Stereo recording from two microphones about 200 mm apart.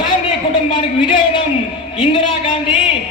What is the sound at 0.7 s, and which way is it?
Speech, 25° left (ahead or behind).